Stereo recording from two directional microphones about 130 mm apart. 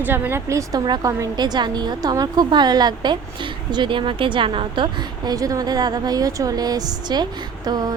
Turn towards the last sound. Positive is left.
turn(degrees=-30)  # may be behind; listen again after turning